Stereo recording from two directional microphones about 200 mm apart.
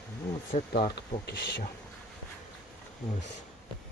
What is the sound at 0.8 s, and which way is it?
Speech, 55° left (ahead or behind).